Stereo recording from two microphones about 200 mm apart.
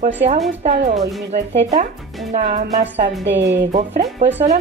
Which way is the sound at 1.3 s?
60° right (ahead or behind).